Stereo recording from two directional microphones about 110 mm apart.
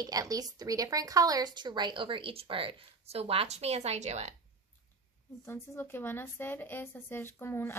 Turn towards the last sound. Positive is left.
turn(degrees=20)  # may be behind; listen again after turning